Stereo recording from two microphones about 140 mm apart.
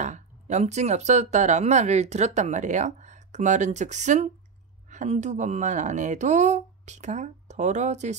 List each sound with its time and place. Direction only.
0.0 s speech: 55° right (ahead or behind)